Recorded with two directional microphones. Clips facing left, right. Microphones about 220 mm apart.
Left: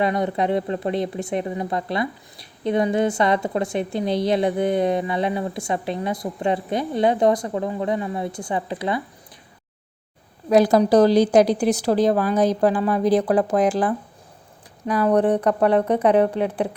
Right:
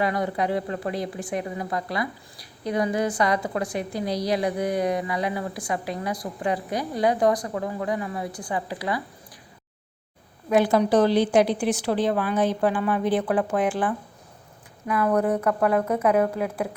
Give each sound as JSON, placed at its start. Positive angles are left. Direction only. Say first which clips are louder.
{"t": 0.0, "sound": "a woman's voice", "louder": "left 3 dB", "side_deg": 25}
{"t": 10.5, "sound": "a woman's voice", "louder": "left 4 dB", "side_deg": 40}